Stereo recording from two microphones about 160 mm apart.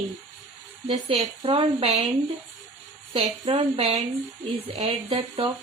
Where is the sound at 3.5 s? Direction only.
40° right (ahead or behind).